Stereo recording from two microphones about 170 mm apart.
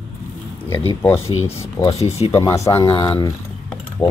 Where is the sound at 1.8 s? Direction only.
40° left (ahead or behind).